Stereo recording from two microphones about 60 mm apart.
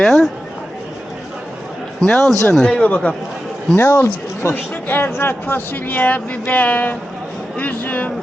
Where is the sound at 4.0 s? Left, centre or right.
Left.